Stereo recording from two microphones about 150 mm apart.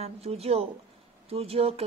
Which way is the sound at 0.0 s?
40° right (ahead or behind).